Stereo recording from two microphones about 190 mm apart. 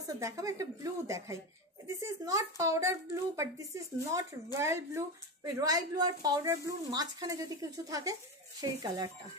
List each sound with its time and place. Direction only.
0.2 s speech: 15° right (ahead or behind)